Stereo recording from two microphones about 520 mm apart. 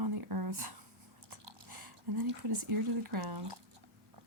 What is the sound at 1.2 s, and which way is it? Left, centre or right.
Chewing, right.